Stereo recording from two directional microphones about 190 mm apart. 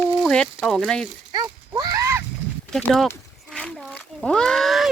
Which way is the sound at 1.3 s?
20° right (ahead or behind).